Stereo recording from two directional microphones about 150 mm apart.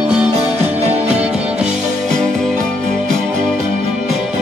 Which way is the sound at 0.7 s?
45° right (ahead or behind).